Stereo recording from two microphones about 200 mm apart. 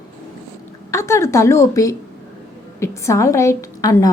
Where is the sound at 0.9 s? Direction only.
15° left (ahead or behind).